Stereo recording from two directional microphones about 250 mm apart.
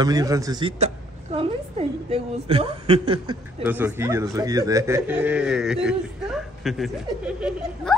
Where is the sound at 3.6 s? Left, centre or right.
Centre.